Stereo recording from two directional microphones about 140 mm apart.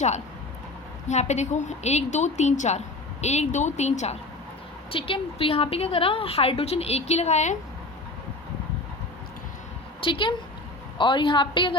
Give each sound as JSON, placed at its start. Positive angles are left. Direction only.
{"t": 1.0, "sound": "a woman's voice", "side_deg": 55}
{"t": 4.9, "sound": "a woman's voice", "side_deg": 40}
{"t": 10.0, "sound": "a woman's voice", "side_deg": 35}